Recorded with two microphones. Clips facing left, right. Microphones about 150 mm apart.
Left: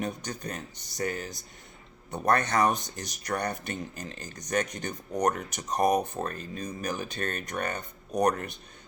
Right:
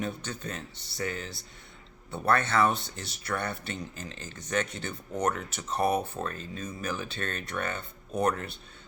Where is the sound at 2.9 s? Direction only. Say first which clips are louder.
Left 2 dB; 40° left (ahead or behind).